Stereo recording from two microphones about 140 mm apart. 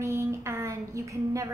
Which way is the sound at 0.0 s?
20° right (ahead or behind).